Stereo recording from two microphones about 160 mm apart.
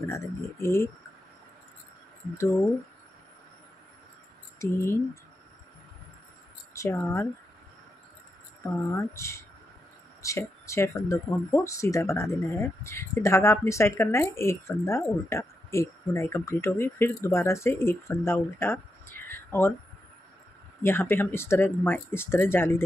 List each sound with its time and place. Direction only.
0.1 s speech: 15° left (ahead or behind)
4.6 s speech: 20° left (ahead or behind)
6.7 s speech: 20° left (ahead or behind)
8.9 s speech: 15° left (ahead or behind)
20.8 s speech: 15° left (ahead or behind)